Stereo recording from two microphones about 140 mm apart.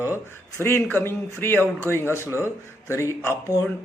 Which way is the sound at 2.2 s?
15° right (ahead or behind).